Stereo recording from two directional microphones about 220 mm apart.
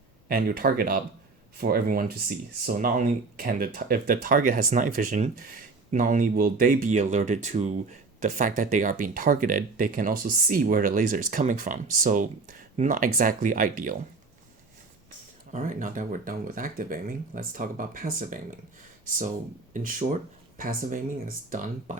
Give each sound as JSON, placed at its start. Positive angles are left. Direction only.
{"t": 0.3, "sound": "speech", "side_deg": -45}
{"t": 15.5, "sound": "speech", "side_deg": -35}
{"t": 19.7, "sound": "speech", "side_deg": -40}